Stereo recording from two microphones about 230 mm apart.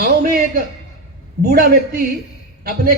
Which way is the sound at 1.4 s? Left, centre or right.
Right.